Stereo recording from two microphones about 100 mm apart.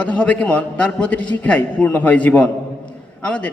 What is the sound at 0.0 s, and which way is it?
A man's voice, 15° left (ahead or behind).